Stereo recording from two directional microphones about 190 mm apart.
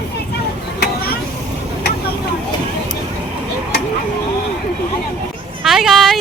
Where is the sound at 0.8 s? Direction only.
55° left (ahead or behind).